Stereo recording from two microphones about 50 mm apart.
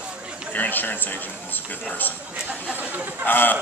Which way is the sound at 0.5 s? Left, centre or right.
Left.